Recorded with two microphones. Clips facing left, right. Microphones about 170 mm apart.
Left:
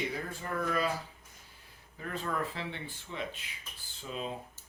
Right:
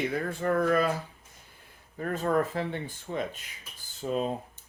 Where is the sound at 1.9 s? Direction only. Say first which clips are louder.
Right 9 dB; 50° right (ahead or behind).